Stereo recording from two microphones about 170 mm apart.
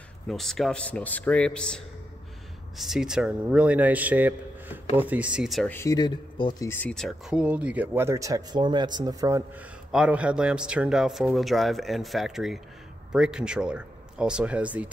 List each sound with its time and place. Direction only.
0.3 s a man's voice: centre (ahead or behind)
2.8 s speech: 5° right (ahead or behind)
5.7 s speech: 15° left (ahead or behind)
6.7 s speech: 5° left (ahead or behind); by 9.4 s 20° right (ahead or behind)
9.8 s a man's voice: 5° right (ahead or behind)